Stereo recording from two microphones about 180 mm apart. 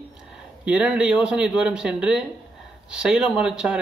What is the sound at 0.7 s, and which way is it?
A man's voice, 5° right (ahead or behind).